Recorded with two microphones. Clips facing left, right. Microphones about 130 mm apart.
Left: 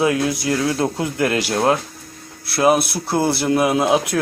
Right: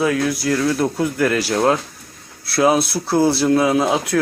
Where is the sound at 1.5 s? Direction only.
5° left (ahead or behind).